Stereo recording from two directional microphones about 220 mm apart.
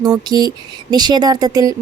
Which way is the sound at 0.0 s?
20° right (ahead or behind).